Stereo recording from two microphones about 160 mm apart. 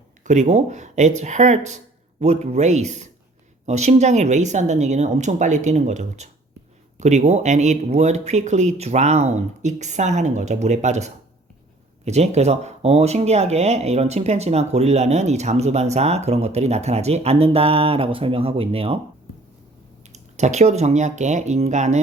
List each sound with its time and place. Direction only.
0.3 s speech: 45° right (ahead or behind)
20.1 s speech: 45° right (ahead or behind)